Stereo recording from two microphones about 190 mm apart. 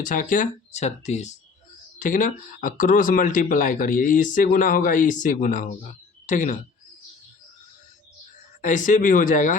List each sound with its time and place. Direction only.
0.0 s speech: 45° left (ahead or behind)
8.6 s speech: 40° left (ahead or behind)